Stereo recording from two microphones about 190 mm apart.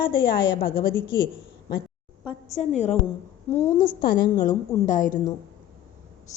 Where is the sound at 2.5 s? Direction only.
35° left (ahead or behind).